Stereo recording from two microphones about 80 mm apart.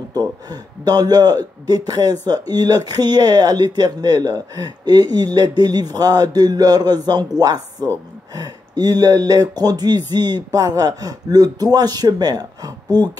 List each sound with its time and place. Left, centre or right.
0.1 s a man's voice: right